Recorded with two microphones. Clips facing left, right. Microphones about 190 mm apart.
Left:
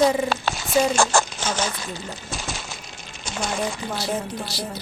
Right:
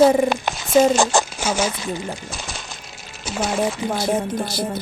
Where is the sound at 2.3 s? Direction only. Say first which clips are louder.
Left 1 dB; centre (ahead or behind).